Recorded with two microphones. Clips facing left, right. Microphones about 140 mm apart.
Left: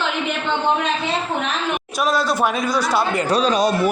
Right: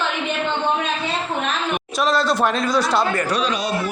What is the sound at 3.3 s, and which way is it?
Speech, 35° left (ahead or behind).